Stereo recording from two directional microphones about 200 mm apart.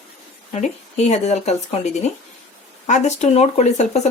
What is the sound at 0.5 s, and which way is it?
Speech, 35° left (ahead or behind).